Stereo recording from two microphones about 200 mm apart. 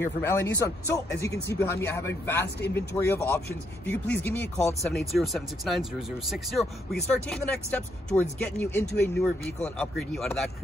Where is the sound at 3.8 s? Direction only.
5° left (ahead or behind).